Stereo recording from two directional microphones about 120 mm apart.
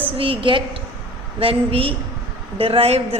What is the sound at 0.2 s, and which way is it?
A woman's voice, 45° right (ahead or behind).